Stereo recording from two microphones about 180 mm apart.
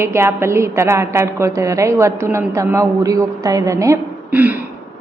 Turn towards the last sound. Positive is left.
turn(degrees=-10)  # may be behind; listen again after turning